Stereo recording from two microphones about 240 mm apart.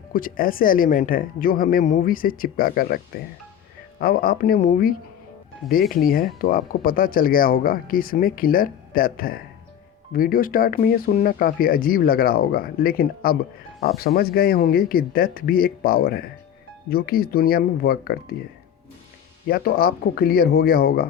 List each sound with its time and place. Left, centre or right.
0.1 s speech: left
4.0 s speech: left
19.5 s speech: left